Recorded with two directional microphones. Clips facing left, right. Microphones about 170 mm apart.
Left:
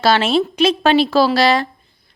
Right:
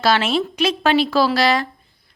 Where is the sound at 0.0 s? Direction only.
30° left (ahead or behind).